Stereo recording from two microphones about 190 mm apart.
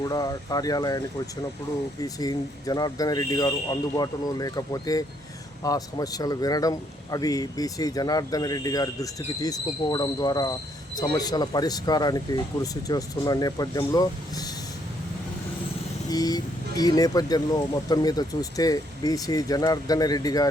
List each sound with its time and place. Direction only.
0.0 s speech: 20° left (ahead or behind)
16.0 s speech: 20° left (ahead or behind)